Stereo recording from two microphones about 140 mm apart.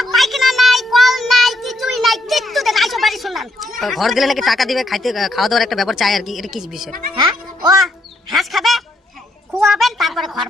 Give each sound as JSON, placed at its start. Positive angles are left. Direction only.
{"t": 0.0, "sound": "child singing", "side_deg": 0}
{"t": 3.8, "sound": "speech", "side_deg": 0}
{"t": 7.2, "sound": "music", "side_deg": -30}
{"t": 8.3, "sound": "music", "side_deg": 0}
{"t": 9.5, "sound": "a sound", "side_deg": 0}